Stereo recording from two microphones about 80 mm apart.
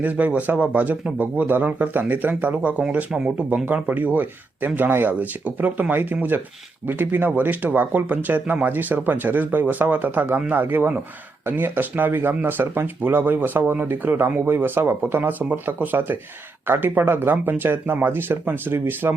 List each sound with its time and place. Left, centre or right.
0.0 s speech: centre